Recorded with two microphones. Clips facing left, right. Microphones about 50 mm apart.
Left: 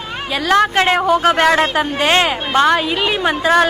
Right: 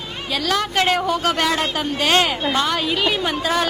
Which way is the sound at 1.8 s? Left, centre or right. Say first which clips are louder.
Left 3 dB; left.